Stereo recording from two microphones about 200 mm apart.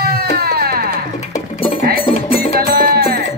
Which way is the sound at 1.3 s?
30° left (ahead or behind).